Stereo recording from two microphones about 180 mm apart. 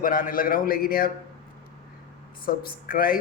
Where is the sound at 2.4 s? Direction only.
55° left (ahead or behind).